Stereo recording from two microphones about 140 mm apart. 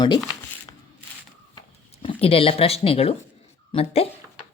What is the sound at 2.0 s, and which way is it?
Speech, 40° left (ahead or behind).